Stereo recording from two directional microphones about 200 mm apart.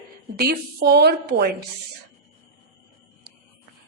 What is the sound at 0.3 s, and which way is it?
A woman's voice, 50° right (ahead or behind).